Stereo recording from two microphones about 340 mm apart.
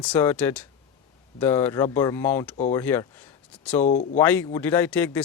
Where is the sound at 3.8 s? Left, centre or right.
Left.